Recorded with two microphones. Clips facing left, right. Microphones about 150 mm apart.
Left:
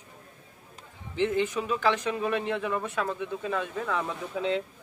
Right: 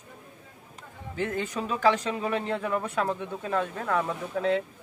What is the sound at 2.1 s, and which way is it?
Speech, centre (ahead or behind).